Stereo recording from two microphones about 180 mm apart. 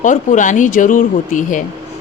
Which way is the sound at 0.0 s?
45° left (ahead or behind).